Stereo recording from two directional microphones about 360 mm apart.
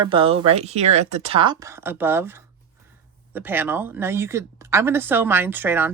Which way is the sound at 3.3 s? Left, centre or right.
Centre.